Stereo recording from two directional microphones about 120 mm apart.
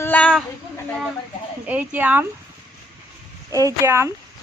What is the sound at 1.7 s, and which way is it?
Speech, 15° right (ahead or behind).